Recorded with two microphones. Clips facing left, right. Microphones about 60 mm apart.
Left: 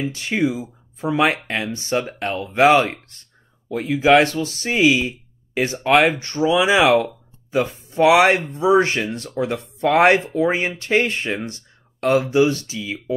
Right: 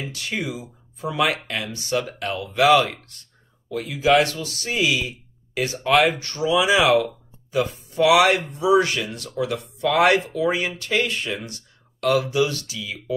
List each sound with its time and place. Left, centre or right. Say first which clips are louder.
0.0 s speech: left 7 dB; left